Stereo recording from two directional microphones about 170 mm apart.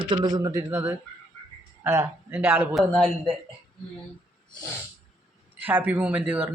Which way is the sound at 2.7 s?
Centre (ahead or behind).